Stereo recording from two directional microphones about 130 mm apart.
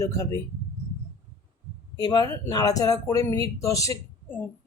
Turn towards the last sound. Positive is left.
turn(degrees=25)  # may be behind; listen again after turning